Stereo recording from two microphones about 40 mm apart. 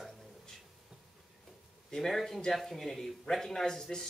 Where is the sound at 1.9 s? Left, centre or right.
Centre.